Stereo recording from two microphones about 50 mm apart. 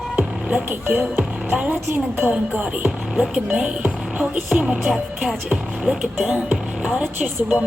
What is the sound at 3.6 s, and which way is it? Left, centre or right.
Music, right.